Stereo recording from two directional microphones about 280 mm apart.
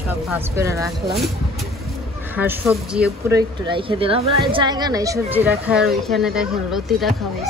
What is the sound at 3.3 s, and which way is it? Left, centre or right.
A child's voice, centre.